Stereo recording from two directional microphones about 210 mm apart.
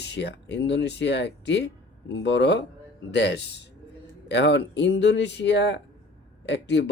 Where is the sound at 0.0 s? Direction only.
55° left (ahead or behind).